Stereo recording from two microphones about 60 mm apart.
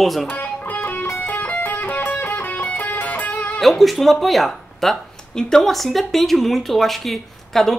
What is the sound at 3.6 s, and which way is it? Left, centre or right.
Speech, centre.